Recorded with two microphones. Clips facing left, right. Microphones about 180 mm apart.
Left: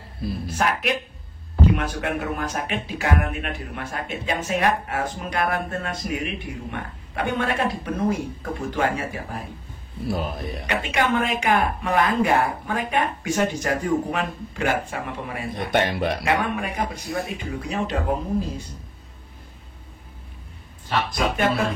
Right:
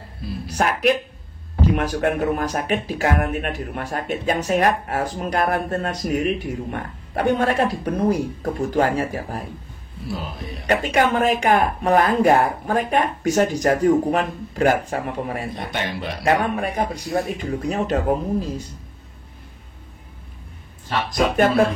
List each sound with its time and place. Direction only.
0.5 s speech: 40° right (ahead or behind)
10.0 s speech: 50° left (ahead or behind)
10.7 s speech: 40° right (ahead or behind)
15.7 s speech: 55° left (ahead or behind)
16.2 s speech: 35° right (ahead or behind)
21.1 s speech: 45° right (ahead or behind)